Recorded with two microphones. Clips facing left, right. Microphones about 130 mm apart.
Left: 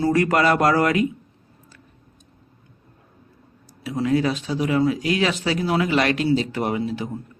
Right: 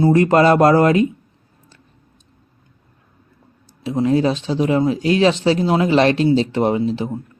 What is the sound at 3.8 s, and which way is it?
Speech, 25° right (ahead or behind).